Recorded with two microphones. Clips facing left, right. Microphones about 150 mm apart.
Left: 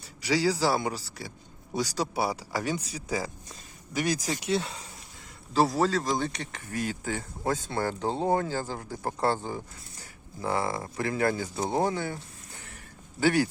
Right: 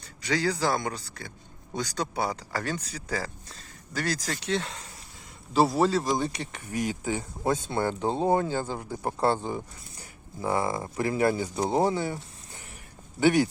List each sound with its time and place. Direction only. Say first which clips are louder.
0.0 s speech: left 2 dB; 10° left (ahead or behind)
5.5 s speech: right 2 dB; 10° right (ahead or behind)